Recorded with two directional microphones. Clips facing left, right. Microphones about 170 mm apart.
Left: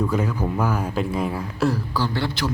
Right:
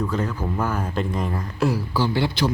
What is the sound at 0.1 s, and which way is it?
Speech, 10° left (ahead or behind).